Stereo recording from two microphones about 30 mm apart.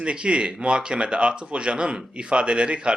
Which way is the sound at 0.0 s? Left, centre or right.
Right.